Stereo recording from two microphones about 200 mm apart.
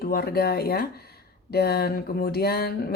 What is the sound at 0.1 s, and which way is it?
A woman's voice, 50° left (ahead or behind).